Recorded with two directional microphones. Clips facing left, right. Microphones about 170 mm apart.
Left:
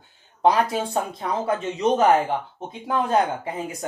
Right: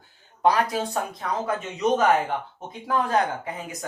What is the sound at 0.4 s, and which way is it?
Speech, 25° left (ahead or behind).